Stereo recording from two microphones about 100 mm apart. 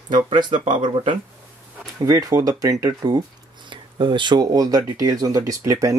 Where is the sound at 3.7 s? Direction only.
55° right (ahead or behind).